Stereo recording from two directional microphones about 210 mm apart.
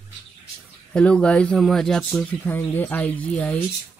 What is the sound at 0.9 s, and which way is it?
Speech, 5° left (ahead or behind).